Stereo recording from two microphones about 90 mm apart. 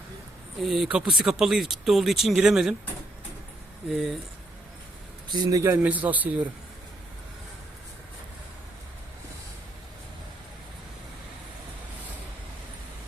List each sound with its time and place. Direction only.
0.6 s speech: centre (ahead or behind)
3.8 s speech: centre (ahead or behind)
5.3 s speech: 45° right (ahead or behind)
5.8 s a man's voice: 20° right (ahead or behind)